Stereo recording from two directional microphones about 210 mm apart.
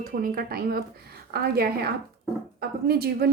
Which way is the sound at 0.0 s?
45° right (ahead or behind).